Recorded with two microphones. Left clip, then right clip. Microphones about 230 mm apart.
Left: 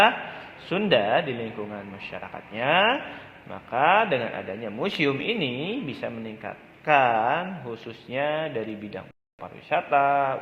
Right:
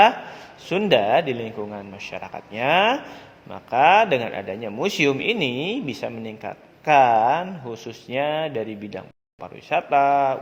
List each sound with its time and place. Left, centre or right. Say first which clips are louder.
0.7 s a man's voice: right 4 dB; right